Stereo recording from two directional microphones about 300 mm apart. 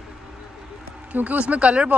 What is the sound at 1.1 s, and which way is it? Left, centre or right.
Speech, centre.